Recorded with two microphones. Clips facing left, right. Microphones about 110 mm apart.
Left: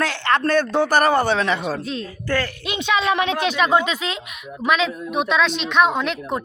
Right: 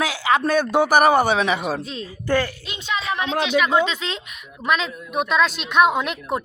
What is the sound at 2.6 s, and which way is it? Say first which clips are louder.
Speech: left 6 dB; 75° left (ahead or behind).